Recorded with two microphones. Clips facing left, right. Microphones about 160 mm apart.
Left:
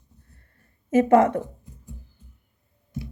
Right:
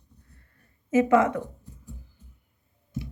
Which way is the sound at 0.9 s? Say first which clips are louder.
Left 3 dB; 55° left (ahead or behind).